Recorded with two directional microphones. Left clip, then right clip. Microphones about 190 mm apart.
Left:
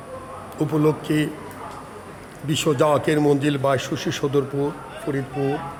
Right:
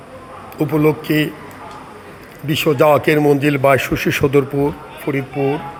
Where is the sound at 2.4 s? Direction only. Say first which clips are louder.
Right 6 dB; 5° right (ahead or behind).